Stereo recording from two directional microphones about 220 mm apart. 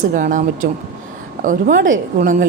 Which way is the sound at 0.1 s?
35° right (ahead or behind).